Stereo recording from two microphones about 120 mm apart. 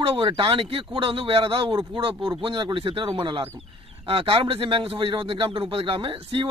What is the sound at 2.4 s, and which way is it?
Speech, 45° right (ahead or behind).